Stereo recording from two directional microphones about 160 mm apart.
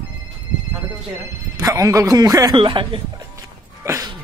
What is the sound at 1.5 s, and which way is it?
Speech, 20° right (ahead or behind).